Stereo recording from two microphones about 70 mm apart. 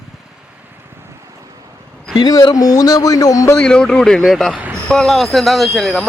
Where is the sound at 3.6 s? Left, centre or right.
Centre.